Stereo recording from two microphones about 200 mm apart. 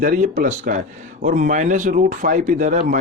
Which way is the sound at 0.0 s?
45° right (ahead or behind).